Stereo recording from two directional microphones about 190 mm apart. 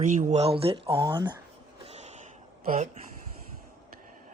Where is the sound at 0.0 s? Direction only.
40° right (ahead or behind); by 1.4 s 25° right (ahead or behind).